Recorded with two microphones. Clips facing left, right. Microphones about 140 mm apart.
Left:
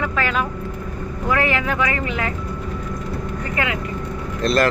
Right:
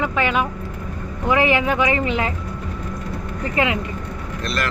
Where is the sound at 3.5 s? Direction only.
25° right (ahead or behind).